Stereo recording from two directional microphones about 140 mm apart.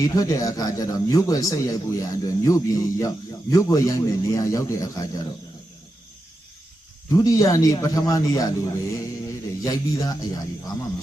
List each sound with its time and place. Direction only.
0.0 s a man's voice: 25° left (ahead or behind)
7.1 s a man's voice: 25° left (ahead or behind)